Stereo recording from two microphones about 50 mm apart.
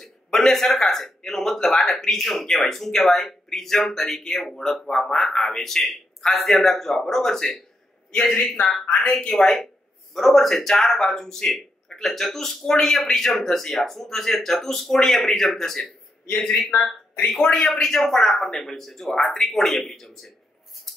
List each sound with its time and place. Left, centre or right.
0.5 s a man's voice: centre
17.6 s speech: centre